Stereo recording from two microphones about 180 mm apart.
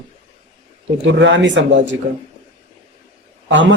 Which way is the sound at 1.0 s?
90° right.